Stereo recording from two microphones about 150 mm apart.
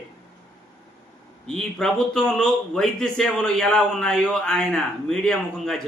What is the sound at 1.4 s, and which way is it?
A man's voice, 5° left (ahead or behind).